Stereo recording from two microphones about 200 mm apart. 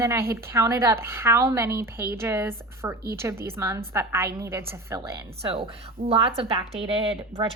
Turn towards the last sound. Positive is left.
turn(degrees=-30)  # may be behind; listen again after turning